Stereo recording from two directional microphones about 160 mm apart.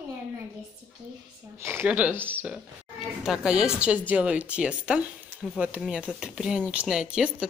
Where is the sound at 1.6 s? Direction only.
15° right (ahead or behind).